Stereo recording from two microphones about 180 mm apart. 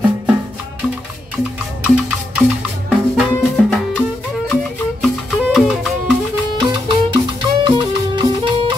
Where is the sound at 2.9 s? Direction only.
Centre (ahead or behind).